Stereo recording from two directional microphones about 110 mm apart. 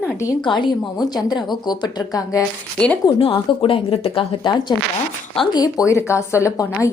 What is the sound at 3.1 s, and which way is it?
Speech, 55° left (ahead or behind).